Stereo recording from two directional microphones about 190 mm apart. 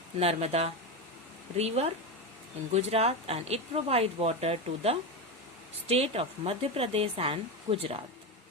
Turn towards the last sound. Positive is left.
turn(degrees=-30)  # may be behind; listen again after turning